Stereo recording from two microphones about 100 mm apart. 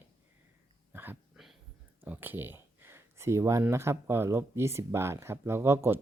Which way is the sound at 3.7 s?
25° right (ahead or behind).